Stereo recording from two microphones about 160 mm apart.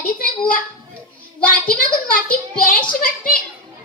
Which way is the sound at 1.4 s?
60° left (ahead or behind).